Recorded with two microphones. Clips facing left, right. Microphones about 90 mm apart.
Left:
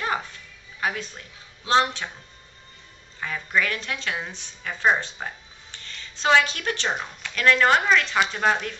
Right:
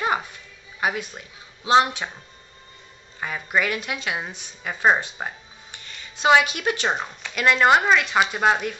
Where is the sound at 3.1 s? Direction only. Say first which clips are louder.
Right 1 dB; 20° right (ahead or behind).